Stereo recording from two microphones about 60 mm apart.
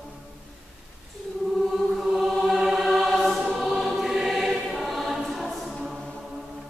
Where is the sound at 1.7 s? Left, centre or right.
Centre.